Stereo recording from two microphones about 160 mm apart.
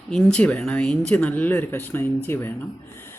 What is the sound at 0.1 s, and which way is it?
Speech, 5° left (ahead or behind).